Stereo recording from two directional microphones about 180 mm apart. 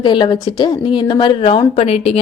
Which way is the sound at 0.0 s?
25° left (ahead or behind).